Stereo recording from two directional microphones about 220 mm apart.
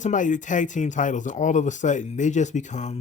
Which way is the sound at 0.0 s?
35° left (ahead or behind).